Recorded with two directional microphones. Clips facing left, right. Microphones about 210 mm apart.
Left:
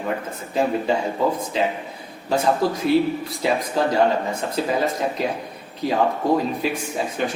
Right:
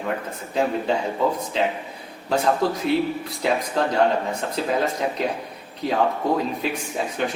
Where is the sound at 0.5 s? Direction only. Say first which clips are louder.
Left 1 dB; 5° left (ahead or behind).